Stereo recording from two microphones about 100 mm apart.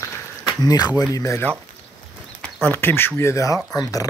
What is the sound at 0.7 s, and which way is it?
Speech, 40° left (ahead or behind).